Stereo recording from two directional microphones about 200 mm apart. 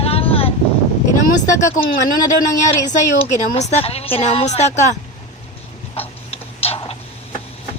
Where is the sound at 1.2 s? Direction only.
45° left (ahead or behind).